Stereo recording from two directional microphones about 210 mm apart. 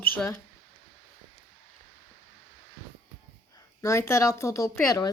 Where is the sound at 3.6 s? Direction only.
15° left (ahead or behind).